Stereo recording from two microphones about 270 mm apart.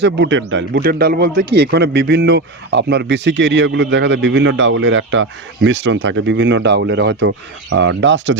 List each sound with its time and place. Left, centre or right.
0.0 s a man's voice: right